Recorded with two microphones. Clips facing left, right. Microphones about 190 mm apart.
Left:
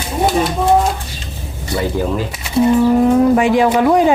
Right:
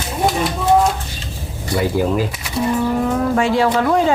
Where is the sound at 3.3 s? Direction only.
15° left (ahead or behind).